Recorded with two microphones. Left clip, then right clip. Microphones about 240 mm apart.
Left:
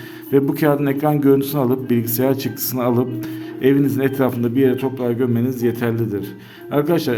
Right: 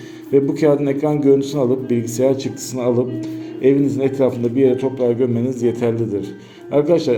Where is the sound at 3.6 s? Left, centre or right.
Left.